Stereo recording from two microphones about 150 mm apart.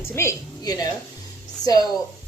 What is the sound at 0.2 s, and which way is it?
A woman's voice, 20° left (ahead or behind).